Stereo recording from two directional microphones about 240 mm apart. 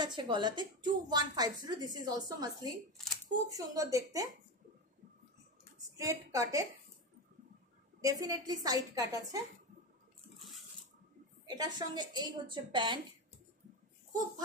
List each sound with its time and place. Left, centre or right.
0.0 s a woman's voice: centre
5.9 s a woman's voice: centre
8.0 s a woman's voice: centre
11.4 s a woman's voice: centre